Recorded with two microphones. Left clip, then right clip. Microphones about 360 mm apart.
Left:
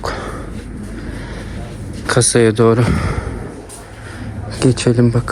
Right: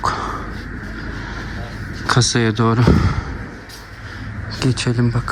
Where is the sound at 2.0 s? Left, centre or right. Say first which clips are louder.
Left 4 dB; centre.